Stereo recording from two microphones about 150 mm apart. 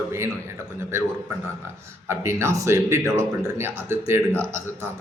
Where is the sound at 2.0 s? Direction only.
15° right (ahead or behind).